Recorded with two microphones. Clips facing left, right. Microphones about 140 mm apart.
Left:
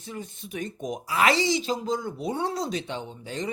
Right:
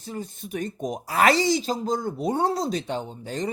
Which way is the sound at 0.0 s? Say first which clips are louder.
Right 3 dB; 40° right (ahead or behind).